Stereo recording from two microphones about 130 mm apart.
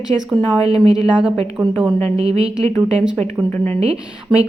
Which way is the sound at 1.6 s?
30° right (ahead or behind).